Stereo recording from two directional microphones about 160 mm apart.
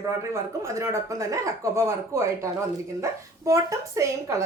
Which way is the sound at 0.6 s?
20° right (ahead or behind).